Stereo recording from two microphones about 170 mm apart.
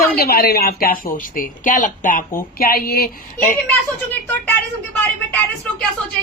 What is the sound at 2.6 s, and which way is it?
Speech, 65° left (ahead or behind).